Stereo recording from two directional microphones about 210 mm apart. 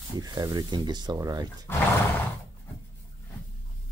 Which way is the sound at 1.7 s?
10° left (ahead or behind).